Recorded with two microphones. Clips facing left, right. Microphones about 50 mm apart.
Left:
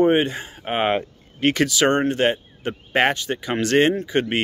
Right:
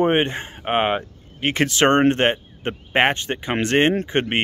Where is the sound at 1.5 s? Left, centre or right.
Right.